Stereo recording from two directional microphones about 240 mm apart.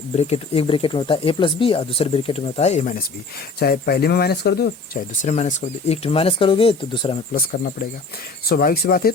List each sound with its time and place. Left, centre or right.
0.2 s speech: left
3.6 s speech: left
5.2 s speech: left
7.3 s speech: left